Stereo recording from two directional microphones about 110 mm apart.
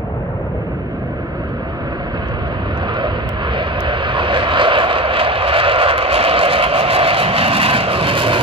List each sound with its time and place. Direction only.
3.5 s vehicle: 45° right (ahead or behind)